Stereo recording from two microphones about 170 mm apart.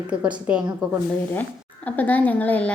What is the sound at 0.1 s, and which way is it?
Speech, 5° right (ahead or behind).